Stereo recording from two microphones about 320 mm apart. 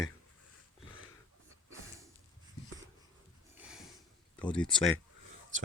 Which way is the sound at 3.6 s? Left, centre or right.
Centre.